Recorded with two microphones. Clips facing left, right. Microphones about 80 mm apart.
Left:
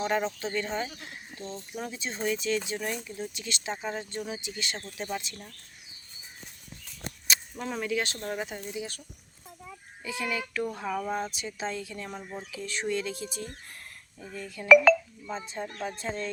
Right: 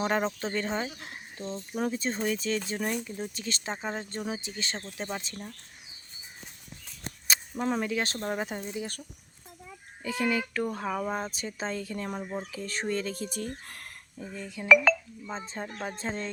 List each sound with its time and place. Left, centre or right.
0.0 s speech: right
0.9 s speech: right
1.4 s speech: right
7.3 s speech: right
10.0 s speech: right
10.8 s speech: centre
11.1 s speech: right
14.2 s speech: right
14.7 s speech: centre
15.3 s speech: right